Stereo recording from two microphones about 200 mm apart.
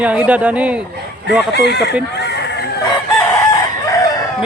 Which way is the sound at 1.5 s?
55° left (ahead or behind).